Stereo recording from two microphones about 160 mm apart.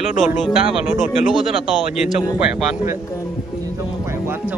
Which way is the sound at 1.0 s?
Centre (ahead or behind).